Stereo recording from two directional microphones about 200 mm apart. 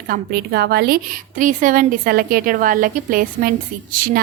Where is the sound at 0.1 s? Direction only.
50° right (ahead or behind).